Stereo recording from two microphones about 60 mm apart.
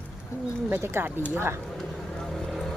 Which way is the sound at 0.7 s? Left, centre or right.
Right.